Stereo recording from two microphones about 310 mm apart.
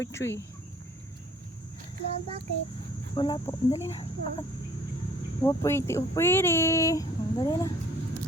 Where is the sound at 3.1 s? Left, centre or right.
Centre.